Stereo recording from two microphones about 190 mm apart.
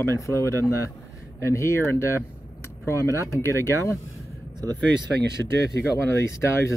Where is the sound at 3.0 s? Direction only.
15° left (ahead or behind).